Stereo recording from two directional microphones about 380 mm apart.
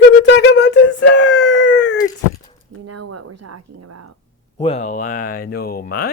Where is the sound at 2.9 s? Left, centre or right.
Right.